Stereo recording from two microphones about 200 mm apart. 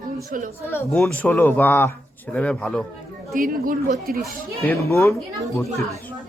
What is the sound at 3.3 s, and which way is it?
Speech, 45° right (ahead or behind).